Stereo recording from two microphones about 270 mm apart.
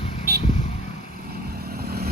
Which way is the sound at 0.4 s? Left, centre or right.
Left.